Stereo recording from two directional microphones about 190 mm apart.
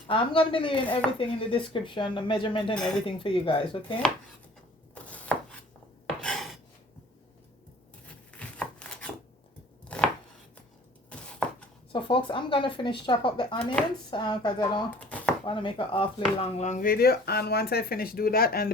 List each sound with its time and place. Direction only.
0.1 s speech: 30° left (ahead or behind)
5.0 s chopping: 5° left (ahead or behind)
6.2 s filing: centre (ahead or behind)
8.0 s a sound: 5° left (ahead or behind)
11.4 s a sound: 5° left (ahead or behind)
11.9 s speech: 25° left (ahead or behind); by 18.7 s 50° left (ahead or behind)